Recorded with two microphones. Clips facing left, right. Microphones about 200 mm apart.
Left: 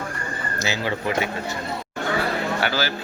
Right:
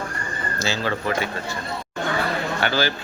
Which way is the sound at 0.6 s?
15° left (ahead or behind).